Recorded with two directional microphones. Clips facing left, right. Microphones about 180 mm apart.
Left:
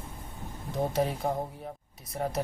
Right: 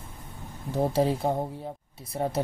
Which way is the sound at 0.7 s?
30° right (ahead or behind).